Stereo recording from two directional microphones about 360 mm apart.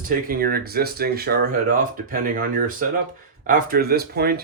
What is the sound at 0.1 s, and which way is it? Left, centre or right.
Speech, right.